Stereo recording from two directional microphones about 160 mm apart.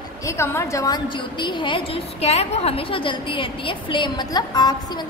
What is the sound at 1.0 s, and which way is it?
A woman's voice, 30° left (ahead or behind).